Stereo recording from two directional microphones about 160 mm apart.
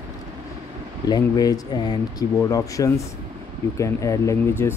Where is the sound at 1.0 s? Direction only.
25° left (ahead or behind).